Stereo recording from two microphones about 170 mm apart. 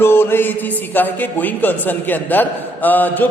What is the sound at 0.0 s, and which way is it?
A man's voice, 15° left (ahead or behind).